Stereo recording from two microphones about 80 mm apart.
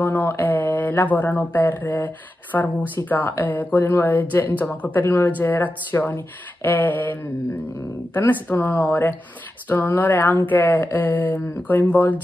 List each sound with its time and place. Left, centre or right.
0.0 s speech: left
8.3 s speech: left